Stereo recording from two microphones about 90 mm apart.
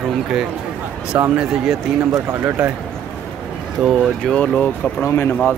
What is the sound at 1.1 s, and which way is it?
Speech, 25° right (ahead or behind).